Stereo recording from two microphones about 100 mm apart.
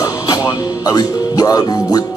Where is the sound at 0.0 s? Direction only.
40° left (ahead or behind).